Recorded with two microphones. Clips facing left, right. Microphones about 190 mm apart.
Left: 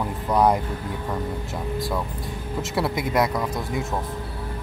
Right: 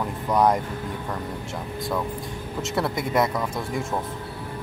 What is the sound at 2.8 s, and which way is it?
Speech, centre (ahead or behind).